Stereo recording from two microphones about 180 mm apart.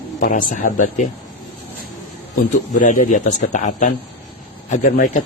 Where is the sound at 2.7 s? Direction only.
45° left (ahead or behind).